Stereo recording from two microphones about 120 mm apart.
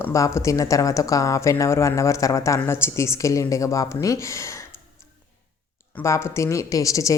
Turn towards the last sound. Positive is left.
turn(degrees=25)  # may be behind; listen again after turning